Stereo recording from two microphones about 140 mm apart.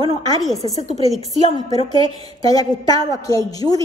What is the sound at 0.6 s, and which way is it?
Speech, 40° right (ahead or behind).